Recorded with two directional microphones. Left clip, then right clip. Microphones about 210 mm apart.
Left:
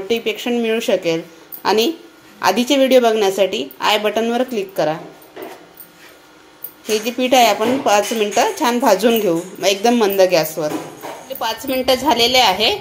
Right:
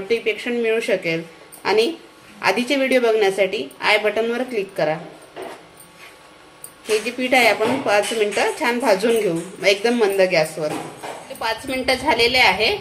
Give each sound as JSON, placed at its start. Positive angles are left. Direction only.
{"t": 0.1, "sound": "a woman's voice", "side_deg": 30}
{"t": 7.2, "sound": "a woman's voice", "side_deg": 30}